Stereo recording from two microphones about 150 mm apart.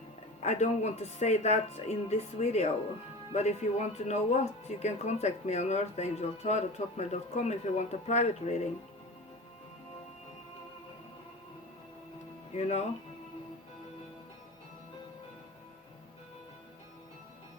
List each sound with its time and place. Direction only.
0.4 s speech: 50° left (ahead or behind)
12.5 s speech: 50° left (ahead or behind)